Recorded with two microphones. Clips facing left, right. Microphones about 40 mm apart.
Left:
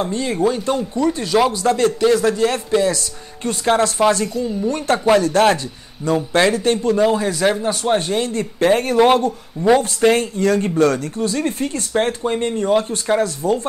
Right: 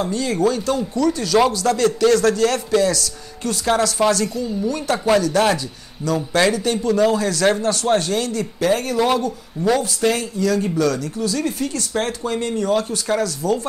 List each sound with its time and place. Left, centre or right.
0.0 s speech: left
4.9 s speech: centre
5.2 s speech: left
6.0 s speech: left
6.5 s speech: left
7.0 s speech: left